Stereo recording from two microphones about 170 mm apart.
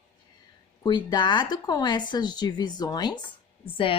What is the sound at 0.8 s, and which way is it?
A woman's voice, 25° left (ahead or behind).